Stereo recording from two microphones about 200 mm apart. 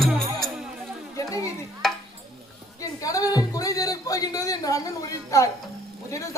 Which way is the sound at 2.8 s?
15° left (ahead or behind).